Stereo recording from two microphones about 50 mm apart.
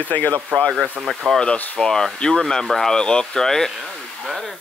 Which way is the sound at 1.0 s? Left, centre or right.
Centre.